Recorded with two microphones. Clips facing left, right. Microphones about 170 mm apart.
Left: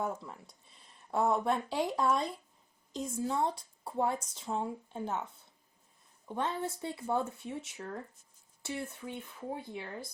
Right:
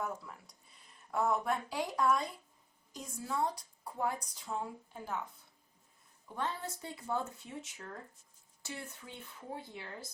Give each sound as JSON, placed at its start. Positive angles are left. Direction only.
{"t": 0.0, "sound": "a woman's voice", "side_deg": 25}
{"t": 6.2, "sound": "a woman's voice", "side_deg": 20}